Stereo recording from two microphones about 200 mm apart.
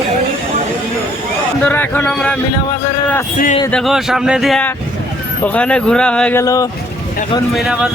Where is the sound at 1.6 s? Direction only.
10° left (ahead or behind).